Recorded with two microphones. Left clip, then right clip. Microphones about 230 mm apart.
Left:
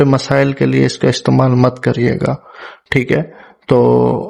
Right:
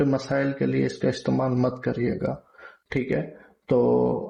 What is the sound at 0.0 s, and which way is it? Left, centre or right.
Speech, left.